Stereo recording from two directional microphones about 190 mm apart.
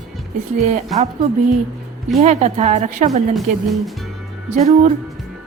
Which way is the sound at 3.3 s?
Centre (ahead or behind).